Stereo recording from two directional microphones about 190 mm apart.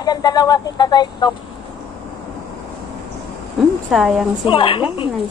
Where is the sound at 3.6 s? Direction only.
Centre (ahead or behind).